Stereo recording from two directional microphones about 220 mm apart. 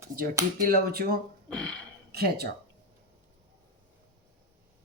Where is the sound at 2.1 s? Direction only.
45° right (ahead or behind).